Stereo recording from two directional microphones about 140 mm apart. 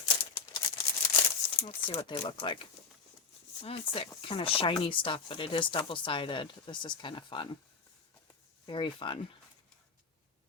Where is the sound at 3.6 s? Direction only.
40° left (ahead or behind).